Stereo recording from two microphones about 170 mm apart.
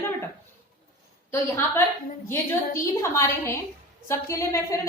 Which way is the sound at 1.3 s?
15° left (ahead or behind).